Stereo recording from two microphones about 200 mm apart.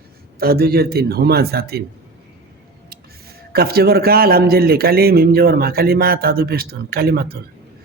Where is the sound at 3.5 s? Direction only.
50° right (ahead or behind).